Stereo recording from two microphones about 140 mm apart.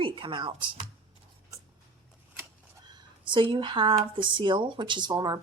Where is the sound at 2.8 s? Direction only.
35° right (ahead or behind).